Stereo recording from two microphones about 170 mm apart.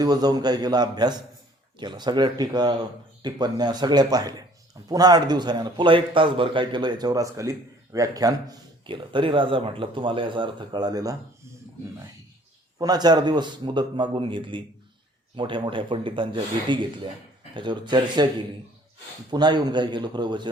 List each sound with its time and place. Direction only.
0.0 s a man's voice: 25° right (ahead or behind)
12.8 s a man's voice: 25° right (ahead or behind)
19.3 s a man's voice: 25° right (ahead or behind)